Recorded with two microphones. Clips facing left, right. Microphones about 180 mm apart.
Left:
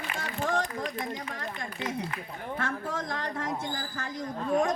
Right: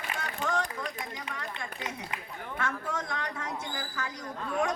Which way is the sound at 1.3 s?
35° left (ahead or behind).